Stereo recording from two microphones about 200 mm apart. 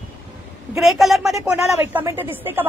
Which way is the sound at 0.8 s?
Centre (ahead or behind).